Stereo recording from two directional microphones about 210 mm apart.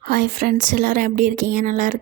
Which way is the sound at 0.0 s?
40° right (ahead or behind).